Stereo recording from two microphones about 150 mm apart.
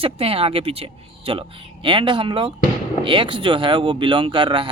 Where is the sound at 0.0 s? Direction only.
40° right (ahead or behind).